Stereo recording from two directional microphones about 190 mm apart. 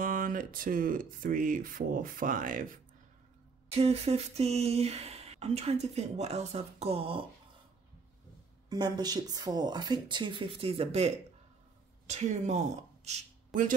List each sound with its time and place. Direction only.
0.0 s speech: 45° right (ahead or behind)
3.7 s speech: 30° right (ahead or behind)
8.6 s speech: 20° right (ahead or behind); by 13.7 s 40° right (ahead or behind)